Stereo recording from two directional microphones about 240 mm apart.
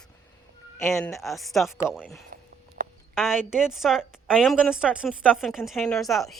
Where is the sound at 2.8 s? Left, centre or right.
Right.